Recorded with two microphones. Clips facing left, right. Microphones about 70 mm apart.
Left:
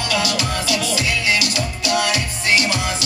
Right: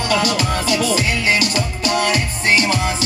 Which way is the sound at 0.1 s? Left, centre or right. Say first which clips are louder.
Right 4 dB; right.